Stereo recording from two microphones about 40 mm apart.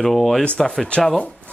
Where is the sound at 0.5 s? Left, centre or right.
Centre.